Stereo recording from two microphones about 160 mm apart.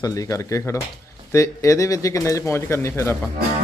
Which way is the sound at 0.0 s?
20° left (ahead or behind).